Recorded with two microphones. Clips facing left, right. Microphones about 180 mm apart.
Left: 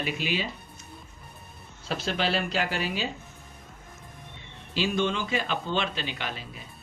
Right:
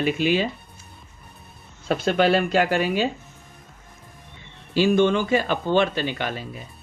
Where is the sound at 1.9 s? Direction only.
55° right (ahead or behind).